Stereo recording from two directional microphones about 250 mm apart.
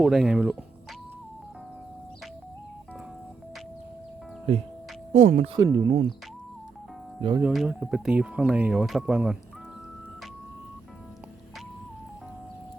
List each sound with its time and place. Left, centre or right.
0.0 s speech: centre
4.5 s speech: right
5.5 s speech: centre
7.2 s speech: centre
7.4 s speech: centre